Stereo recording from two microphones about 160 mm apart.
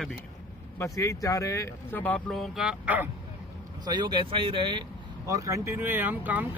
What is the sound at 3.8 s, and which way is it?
Speech, 25° right (ahead or behind).